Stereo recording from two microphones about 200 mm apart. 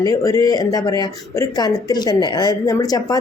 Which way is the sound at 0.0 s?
15° left (ahead or behind).